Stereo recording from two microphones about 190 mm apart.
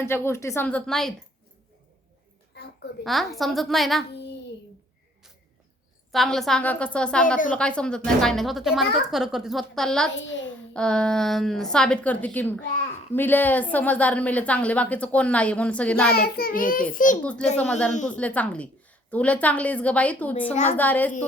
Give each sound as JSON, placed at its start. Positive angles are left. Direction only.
{"t": 0.0, "sound": "a woman's voice", "side_deg": 15}
{"t": 2.5, "sound": "a sound", "side_deg": 55}
{"t": 3.0, "sound": "speech", "side_deg": 0}
{"t": 4.1, "sound": "child singing", "side_deg": 65}
{"t": 6.1, "sound": "speech", "side_deg": 0}
{"t": 10.2, "sound": "a child's voice", "side_deg": 75}
{"t": 10.8, "sound": "a woman's voice", "side_deg": 5}
{"t": 16.0, "sound": "child singing", "side_deg": 55}
{"t": 17.6, "sound": "speech", "side_deg": 5}
{"t": 17.9, "sound": "a woman's voice", "side_deg": 40}
{"t": 18.2, "sound": "a woman's voice", "side_deg": 5}
{"t": 20.4, "sound": "a woman's voice", "side_deg": 35}
{"t": 20.7, "sound": "a woman's voice", "side_deg": 10}